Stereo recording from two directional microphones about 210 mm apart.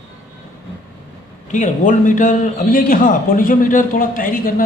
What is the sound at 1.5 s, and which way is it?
A man's voice, 35° left (ahead or behind).